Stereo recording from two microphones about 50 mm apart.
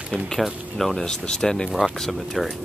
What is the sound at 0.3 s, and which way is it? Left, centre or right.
Speech, centre.